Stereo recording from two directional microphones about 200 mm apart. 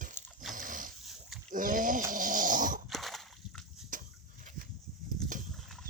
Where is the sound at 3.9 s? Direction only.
40° right (ahead or behind).